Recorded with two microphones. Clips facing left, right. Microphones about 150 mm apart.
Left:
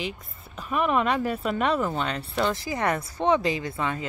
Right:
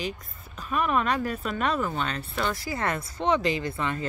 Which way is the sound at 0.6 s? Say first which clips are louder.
Left 2 dB; 15° left (ahead or behind).